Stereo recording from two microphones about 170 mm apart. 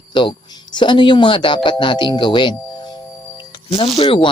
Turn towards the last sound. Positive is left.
turn(degrees=30)  # may be behind; listen again after turning